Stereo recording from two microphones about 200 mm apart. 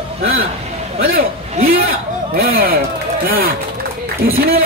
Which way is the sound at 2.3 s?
50° right (ahead or behind).